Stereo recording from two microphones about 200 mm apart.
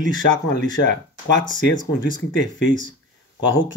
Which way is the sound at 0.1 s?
70° left (ahead or behind).